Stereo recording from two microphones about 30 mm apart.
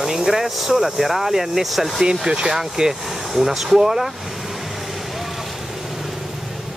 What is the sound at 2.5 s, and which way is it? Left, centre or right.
Speech, centre.